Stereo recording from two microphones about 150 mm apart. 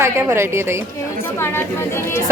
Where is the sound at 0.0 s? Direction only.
15° right (ahead or behind).